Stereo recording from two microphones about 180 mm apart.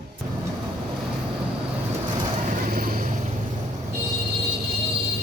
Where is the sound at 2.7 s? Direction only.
50° right (ahead or behind).